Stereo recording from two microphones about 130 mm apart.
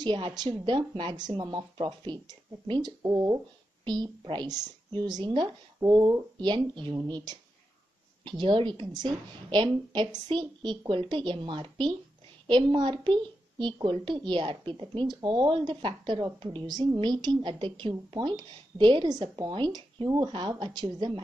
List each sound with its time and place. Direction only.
0.0 s a woman's voice: 35° right (ahead or behind)
3.0 s a woman's voice: 25° right (ahead or behind)